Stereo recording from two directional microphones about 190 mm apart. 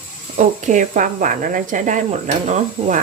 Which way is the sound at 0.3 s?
40° right (ahead or behind).